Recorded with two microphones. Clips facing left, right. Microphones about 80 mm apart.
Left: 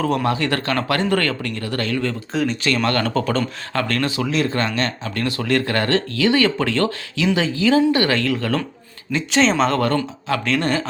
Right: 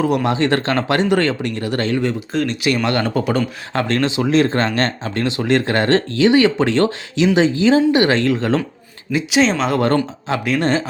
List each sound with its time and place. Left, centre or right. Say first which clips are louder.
0.0 s speech: right 3 dB; centre
0.3 s speech: right 4 dB; right
2.3 s speech: left 2 dB; centre
2.6 s speech: right 2 dB; centre; by 5.1 s right
5.1 s speech: right 3 dB; right
9.1 s speech: right 1 dB; centre
10.6 s speech: right 3 dB; right